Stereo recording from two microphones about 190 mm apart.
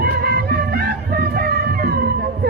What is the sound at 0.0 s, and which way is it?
Music, 55° right (ahead or behind).